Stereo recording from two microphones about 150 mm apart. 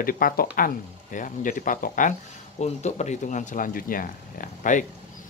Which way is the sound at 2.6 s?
50° left (ahead or behind).